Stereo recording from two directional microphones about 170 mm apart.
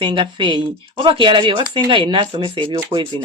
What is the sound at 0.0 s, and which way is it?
Speech, 30° right (ahead or behind).